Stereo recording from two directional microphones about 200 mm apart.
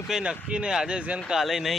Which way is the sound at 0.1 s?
5° right (ahead or behind).